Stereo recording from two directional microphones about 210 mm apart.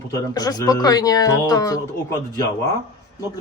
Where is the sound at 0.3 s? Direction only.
20° left (ahead or behind).